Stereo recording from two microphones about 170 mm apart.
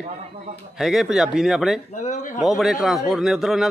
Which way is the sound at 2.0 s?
45° left (ahead or behind).